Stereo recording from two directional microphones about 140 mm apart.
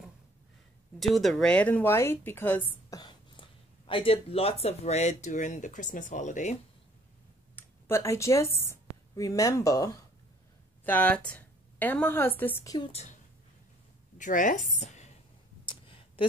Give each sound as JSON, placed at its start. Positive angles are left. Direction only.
{"t": 0.9, "sound": "a woman's voice", "side_deg": 0}
{"t": 2.9, "sound": "speech", "side_deg": 30}
{"t": 7.5, "sound": "a woman's voice", "side_deg": 20}
{"t": 10.9, "sound": "a woman's voice", "side_deg": 10}
{"t": 12.6, "sound": "a woman's voice", "side_deg": 30}
{"t": 12.9, "sound": "a woman's voice", "side_deg": 55}
{"t": 14.1, "sound": "a woman's voice", "side_deg": 65}
{"t": 14.8, "sound": "a sound", "side_deg": 55}
{"t": 15.6, "sound": "a sound", "side_deg": 35}